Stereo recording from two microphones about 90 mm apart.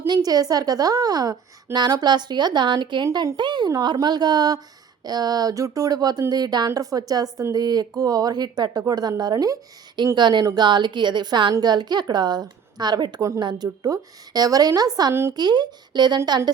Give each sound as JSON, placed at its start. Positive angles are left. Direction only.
{"t": 0.1, "sound": "a woman's voice", "side_deg": -45}